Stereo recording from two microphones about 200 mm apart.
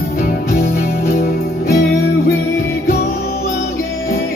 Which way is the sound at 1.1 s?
45° left (ahead or behind).